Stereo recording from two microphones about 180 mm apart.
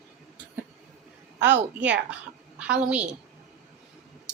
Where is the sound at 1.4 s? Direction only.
80° right.